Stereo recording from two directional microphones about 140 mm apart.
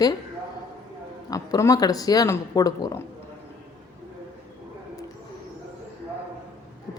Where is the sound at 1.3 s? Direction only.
25° left (ahead or behind).